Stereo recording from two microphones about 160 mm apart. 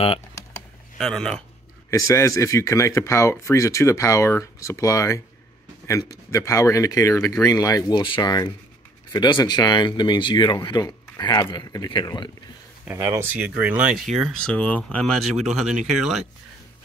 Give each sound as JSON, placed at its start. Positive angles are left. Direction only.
{"t": 0.9, "sound": "speech", "side_deg": 5}
{"t": 1.9, "sound": "speech", "side_deg": 20}
{"t": 12.8, "sound": "speech", "side_deg": -15}